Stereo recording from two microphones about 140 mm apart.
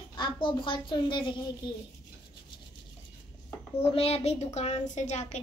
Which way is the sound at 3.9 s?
45° left (ahead or behind).